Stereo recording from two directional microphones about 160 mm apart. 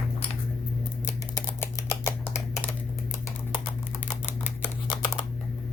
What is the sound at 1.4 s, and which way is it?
Typing, 15° left (ahead or behind).